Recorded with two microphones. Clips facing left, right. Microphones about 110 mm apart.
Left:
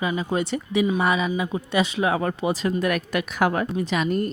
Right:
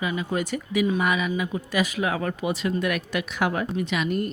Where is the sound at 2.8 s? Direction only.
45° left (ahead or behind).